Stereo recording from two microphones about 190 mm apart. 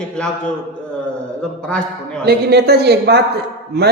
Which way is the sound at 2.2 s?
55° right (ahead or behind).